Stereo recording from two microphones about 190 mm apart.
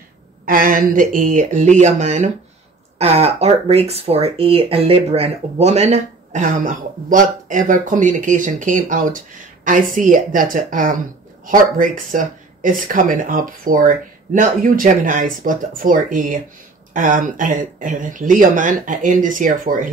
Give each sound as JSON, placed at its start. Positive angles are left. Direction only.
{"t": 0.5, "sound": "speech", "side_deg": -45}